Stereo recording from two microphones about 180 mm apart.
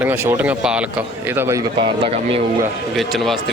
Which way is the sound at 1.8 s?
30° right (ahead or behind).